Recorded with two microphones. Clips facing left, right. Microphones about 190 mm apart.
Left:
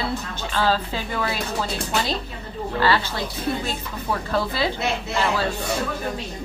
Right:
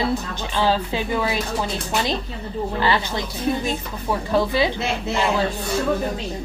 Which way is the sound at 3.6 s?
15° right (ahead or behind).